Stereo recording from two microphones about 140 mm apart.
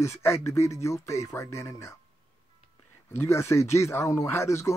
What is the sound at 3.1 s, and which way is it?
Speech, 20° left (ahead or behind).